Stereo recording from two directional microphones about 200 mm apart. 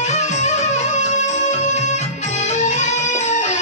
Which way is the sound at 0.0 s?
35° left (ahead or behind).